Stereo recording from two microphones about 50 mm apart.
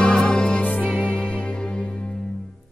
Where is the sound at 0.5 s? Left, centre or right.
Left.